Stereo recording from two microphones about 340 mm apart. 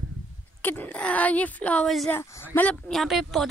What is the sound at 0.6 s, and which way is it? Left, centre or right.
Speech, centre.